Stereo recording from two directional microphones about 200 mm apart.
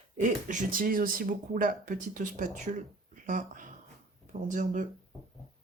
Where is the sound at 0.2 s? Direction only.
40° right (ahead or behind).